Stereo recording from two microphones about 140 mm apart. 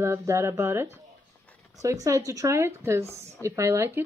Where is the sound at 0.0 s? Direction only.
20° right (ahead or behind).